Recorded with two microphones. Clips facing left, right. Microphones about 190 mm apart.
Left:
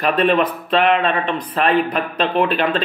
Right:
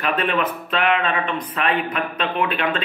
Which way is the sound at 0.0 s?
35° left (ahead or behind).